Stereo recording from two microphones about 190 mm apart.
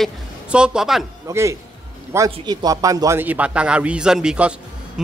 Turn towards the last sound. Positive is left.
turn(degrees=-5)  # may be behind; listen again after turning